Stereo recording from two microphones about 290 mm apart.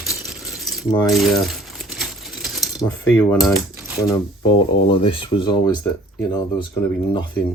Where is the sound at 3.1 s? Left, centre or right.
Centre.